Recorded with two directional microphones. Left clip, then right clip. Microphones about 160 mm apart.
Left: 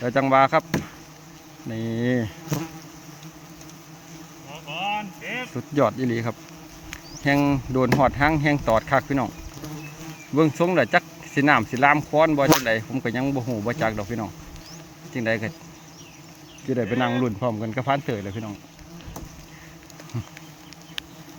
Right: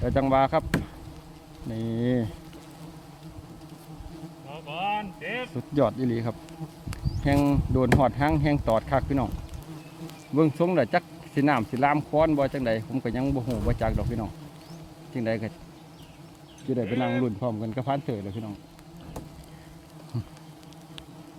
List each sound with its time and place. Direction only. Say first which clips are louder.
0.0 s speech: left 4 dB; 10° right (ahead or behind)
1.7 s speech: left 3 dB; 10° right (ahead or behind)
4.9 s speech: left 2 dB; 30° right (ahead or behind)
5.5 s speech: left 4 dB; 15° right (ahead or behind)
10.3 s speech: left 3 dB; 10° right (ahead or behind)
16.6 s speech: left 4 dB; centre (ahead or behind)